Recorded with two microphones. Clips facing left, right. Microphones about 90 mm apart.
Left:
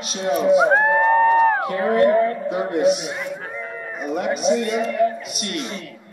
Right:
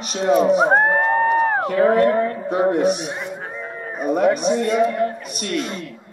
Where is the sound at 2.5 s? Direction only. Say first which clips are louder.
Right 4 dB; 35° right (ahead or behind).